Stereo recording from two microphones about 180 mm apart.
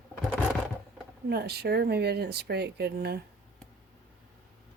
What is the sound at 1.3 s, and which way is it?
Speech, 65° right (ahead or behind).